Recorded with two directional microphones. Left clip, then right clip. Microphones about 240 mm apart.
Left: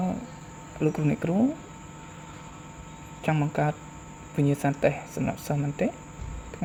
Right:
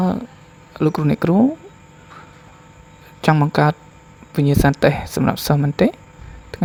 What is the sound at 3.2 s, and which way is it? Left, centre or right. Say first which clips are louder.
Speech: right 11 dB; right.